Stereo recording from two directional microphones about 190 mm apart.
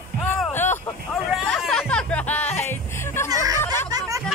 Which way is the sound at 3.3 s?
20° right (ahead or behind).